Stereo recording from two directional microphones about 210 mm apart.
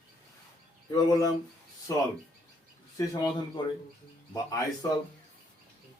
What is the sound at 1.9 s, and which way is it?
Speech, 15° left (ahead or behind).